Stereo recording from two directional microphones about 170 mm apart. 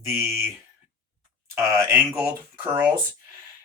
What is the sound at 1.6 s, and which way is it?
Speech, 15° right (ahead or behind).